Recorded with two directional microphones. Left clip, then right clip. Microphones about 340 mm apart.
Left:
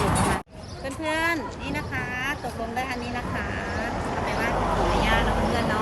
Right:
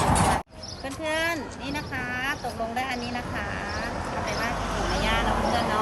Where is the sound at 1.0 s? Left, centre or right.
Centre.